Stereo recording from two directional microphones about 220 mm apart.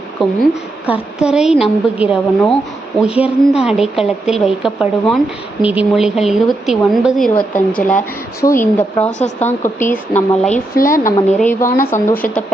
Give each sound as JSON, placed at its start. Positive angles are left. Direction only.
{"t": 0.2, "sound": "speech", "side_deg": 0}
{"t": 9.0, "sound": "a woman's voice", "side_deg": 30}
{"t": 9.7, "sound": "speech", "side_deg": 10}
{"t": 10.8, "sound": "a woman's voice", "side_deg": 40}
{"t": 11.3, "sound": "speech", "side_deg": 10}